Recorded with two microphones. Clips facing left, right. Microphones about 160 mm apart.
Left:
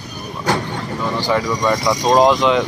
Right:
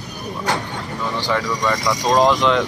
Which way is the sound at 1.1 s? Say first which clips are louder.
Left 3 dB; 10° left (ahead or behind).